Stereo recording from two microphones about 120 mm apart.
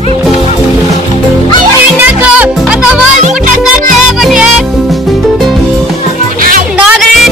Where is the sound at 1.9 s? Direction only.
15° right (ahead or behind).